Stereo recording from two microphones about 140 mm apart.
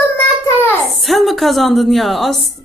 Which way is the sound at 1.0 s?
Centre (ahead or behind).